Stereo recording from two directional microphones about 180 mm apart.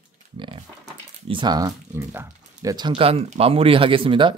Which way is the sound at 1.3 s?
25° right (ahead or behind).